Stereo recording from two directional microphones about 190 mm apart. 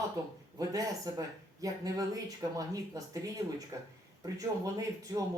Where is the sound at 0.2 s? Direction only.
15° right (ahead or behind).